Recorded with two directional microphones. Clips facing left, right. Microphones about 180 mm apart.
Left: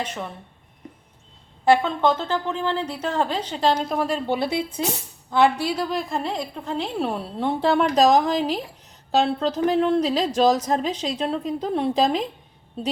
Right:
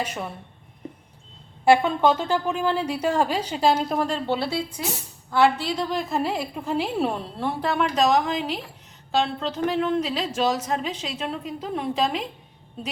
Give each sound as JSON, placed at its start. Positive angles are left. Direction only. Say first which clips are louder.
{"t": 0.0, "sound": "a woman's voice", "louder": "even", "side_deg": -10}
{"t": 1.6, "sound": "a woman's voice", "louder": "right 1 dB", "side_deg": -10}
{"t": 4.4, "sound": "a woman's voice", "louder": "left 3 dB", "side_deg": 20}
{"t": 7.6, "sound": "a woman's voice", "louder": "left 4 dB", "side_deg": 30}